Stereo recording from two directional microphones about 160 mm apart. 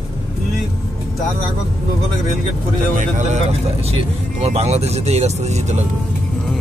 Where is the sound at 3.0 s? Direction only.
50° right (ahead or behind).